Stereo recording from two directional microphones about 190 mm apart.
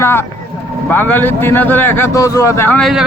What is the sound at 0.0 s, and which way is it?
A man's voice, 10° left (ahead or behind).